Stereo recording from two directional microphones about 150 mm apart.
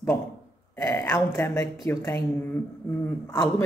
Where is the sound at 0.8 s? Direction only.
10° left (ahead or behind).